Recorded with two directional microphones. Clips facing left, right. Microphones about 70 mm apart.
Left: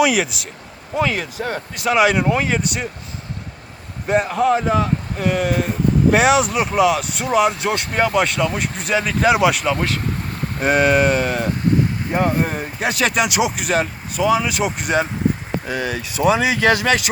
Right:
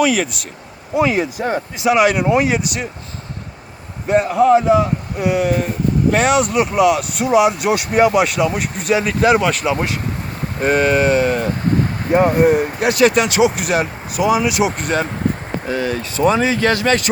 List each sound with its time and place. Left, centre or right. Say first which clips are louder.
0.0 s speech: right 1 dB; centre
0.9 s speech: right 4 dB; centre
2.0 s speech: even; centre
2.3 s speech: right 4 dB; centre
2.6 s speech: even; centre
4.0 s speech: right 4 dB; centre
9.6 s speech: right 1 dB; centre
10.6 s speech: right 1 dB; centre
12.1 s speech: right 8 dB; centre
14.8 s speech: even; centre